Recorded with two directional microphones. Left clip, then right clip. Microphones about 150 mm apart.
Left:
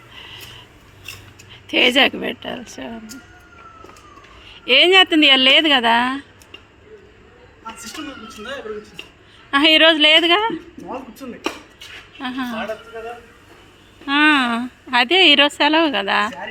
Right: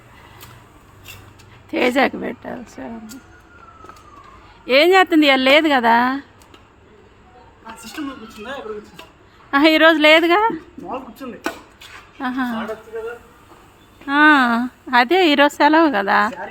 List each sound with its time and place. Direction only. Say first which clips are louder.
1.6 s a woman's voice: left 3 dB; 15° right (ahead or behind)
4.4 s a woman's voice: even; 20° right (ahead or behind)
9.5 s a woman's voice: even; 30° right (ahead or behind)
10.8 s chopping: right 2 dB; 15° right (ahead or behind)
12.2 s a woman's voice: right 3 dB; 35° right (ahead or behind)
14.0 s a woman's voice: right 2 dB; 25° right (ahead or behind)